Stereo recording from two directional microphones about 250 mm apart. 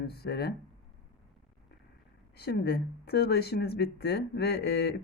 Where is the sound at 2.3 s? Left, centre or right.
Left.